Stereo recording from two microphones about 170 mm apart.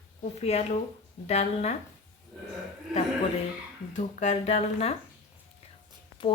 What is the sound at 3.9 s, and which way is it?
Speech, 40° left (ahead or behind).